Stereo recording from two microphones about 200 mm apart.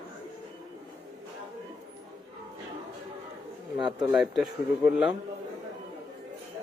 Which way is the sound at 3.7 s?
25° right (ahead or behind).